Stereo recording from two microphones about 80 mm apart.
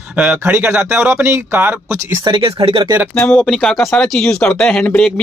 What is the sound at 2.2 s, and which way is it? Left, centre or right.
Speech, right.